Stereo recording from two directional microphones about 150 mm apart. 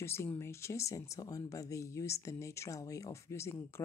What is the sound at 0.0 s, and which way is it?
Speech, 15° left (ahead or behind).